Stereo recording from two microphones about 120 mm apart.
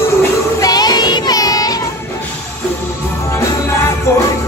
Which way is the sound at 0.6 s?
35° left (ahead or behind).